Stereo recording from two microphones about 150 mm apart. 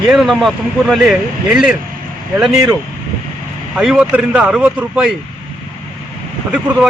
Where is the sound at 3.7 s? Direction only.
5° right (ahead or behind).